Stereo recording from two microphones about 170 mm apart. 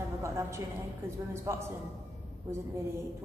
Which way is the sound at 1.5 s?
15° right (ahead or behind).